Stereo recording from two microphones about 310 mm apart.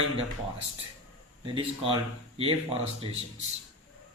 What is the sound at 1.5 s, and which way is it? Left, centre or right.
Speech, centre.